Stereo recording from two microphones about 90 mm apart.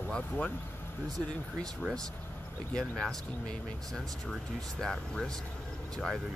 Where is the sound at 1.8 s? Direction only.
5° right (ahead or behind).